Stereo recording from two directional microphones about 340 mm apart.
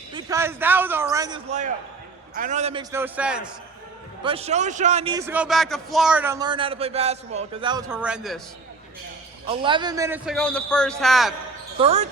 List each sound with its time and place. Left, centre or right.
0.1 s a man's voice: centre
2.9 s a man's voice: centre
4.2 s a man's voice: centre
9.5 s a man's voice: centre
11.8 s a man's voice: centre